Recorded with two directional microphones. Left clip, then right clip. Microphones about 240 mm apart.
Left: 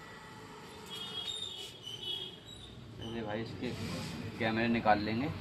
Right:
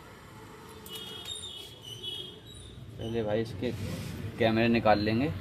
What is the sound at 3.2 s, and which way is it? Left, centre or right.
Speech, right.